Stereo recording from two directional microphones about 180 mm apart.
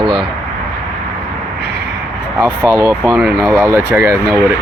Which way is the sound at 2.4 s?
15° right (ahead or behind).